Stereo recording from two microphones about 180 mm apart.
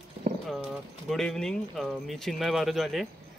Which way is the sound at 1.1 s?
5° left (ahead or behind).